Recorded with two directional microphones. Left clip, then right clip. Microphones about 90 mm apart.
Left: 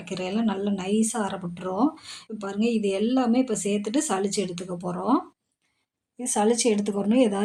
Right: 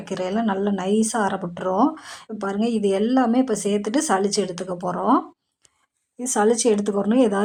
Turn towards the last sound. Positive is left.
turn(degrees=0)  # may be behind; listen again after turning